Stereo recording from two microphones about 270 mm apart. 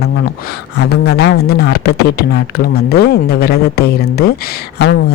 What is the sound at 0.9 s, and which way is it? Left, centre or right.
A man's voice, left.